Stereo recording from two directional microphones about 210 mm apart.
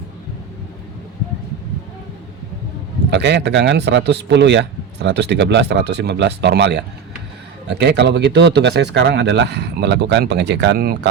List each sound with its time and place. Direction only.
3.1 s speech: 55° right (ahead or behind)